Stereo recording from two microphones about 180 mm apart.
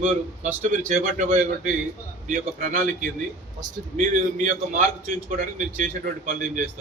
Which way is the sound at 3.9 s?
45° right (ahead or behind).